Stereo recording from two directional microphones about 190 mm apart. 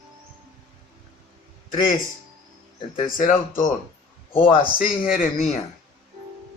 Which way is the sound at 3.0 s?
45° left (ahead or behind).